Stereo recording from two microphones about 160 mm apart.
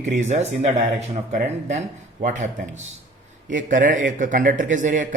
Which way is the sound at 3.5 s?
55° right (ahead or behind).